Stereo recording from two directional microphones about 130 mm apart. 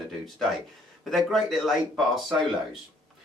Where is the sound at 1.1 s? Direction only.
Centre (ahead or behind).